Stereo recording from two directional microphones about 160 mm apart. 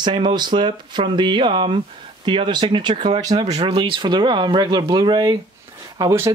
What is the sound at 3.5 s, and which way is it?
Speech, 40° right (ahead or behind).